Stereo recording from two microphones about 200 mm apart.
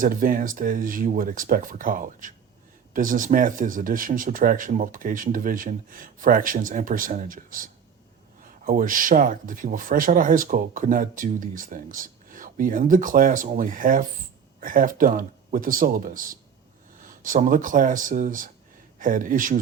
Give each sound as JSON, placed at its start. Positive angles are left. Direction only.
{"t": 0.0, "sound": "speech", "side_deg": -45}